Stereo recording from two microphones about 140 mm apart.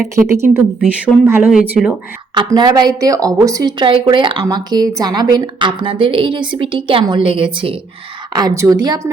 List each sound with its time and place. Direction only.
0.3 s a woman's voice: 20° right (ahead or behind)
2.3 s a woman's voice: 30° right (ahead or behind)
8.3 s a woman's voice: 30° right (ahead or behind)